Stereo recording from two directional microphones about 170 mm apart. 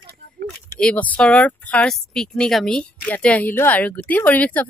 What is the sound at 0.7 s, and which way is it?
Speech, 5° left (ahead or behind).